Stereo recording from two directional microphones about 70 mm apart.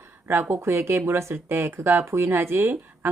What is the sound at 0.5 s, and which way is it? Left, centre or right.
Speech, right.